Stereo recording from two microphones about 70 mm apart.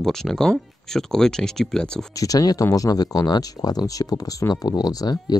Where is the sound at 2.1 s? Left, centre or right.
Left.